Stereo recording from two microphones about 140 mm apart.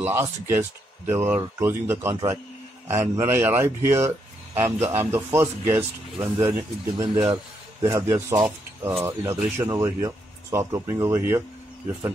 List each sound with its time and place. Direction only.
0.0 s speech: 15° right (ahead or behind)